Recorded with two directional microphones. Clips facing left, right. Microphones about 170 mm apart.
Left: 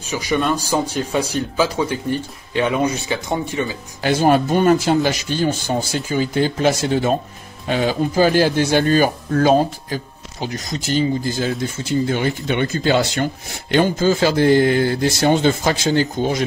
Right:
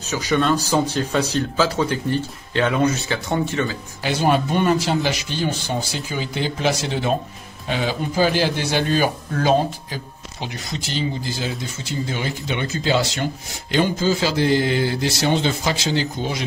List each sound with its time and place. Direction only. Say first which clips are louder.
0.0 s speech: even; 10° left (ahead or behind)
4.0 s speech: left 4 dB; 50° left (ahead or behind)